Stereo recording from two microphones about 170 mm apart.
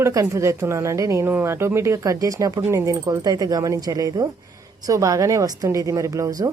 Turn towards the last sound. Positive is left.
turn(degrees=-20)  # may be behind; listen again after turning